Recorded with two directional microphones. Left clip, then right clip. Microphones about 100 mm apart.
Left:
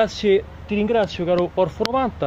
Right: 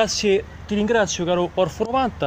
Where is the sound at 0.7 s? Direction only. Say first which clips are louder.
Right 1 dB; centre (ahead or behind).